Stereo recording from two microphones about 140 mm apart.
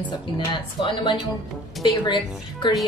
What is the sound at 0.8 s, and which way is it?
Speech, 35° left (ahead or behind).